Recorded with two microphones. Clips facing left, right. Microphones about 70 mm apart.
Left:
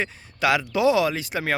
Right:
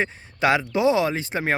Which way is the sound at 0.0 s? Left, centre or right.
Right.